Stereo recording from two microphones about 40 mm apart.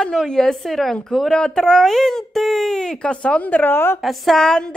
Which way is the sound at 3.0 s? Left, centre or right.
Left.